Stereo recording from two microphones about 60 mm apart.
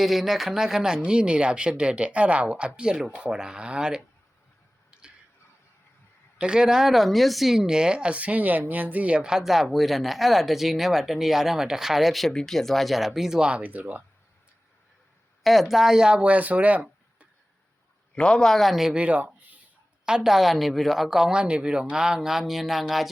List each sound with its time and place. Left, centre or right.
0.0 s speech: centre
4.9 s finger snapping: centre
6.4 s speech: centre
13.6 s speech: right
15.4 s speech: centre; by 17.2 s right
18.1 s speech: centre
18.9 s speech: right
20.1 s speech: centre